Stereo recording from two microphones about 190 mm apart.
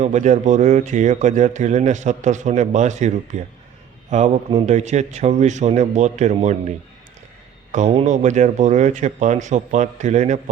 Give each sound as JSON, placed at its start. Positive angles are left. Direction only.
{"t": 0.0, "sound": "speech", "side_deg": -40}